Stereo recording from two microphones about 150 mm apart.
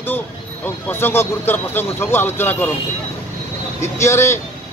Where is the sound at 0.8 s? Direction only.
15° left (ahead or behind).